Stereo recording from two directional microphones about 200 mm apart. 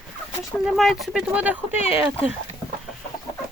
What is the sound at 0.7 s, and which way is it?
Speech, centre (ahead or behind).